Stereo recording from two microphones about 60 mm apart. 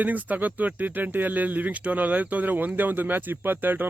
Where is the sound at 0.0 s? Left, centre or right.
Right.